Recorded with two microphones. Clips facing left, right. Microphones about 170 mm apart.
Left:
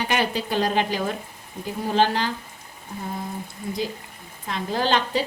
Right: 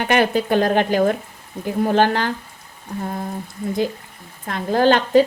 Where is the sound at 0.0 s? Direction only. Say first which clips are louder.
Right 7 dB; 55° right (ahead or behind).